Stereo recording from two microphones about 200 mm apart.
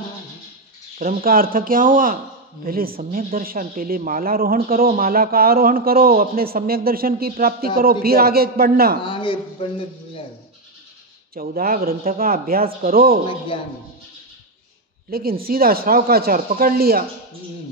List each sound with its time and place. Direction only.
0.9 s speech: 45° right (ahead or behind)
9.0 s a man's voice: 25° left (ahead or behind)
11.3 s speech: 45° right (ahead or behind)
15.0 s speech: 50° right (ahead or behind)